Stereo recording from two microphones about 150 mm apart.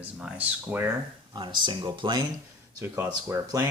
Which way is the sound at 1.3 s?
30° right (ahead or behind).